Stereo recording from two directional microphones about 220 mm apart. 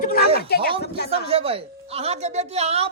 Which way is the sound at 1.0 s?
25° right (ahead or behind).